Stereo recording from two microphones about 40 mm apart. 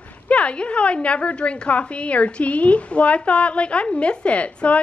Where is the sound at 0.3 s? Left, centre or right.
Left.